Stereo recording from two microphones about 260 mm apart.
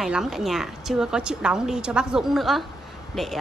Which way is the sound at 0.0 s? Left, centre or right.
Centre.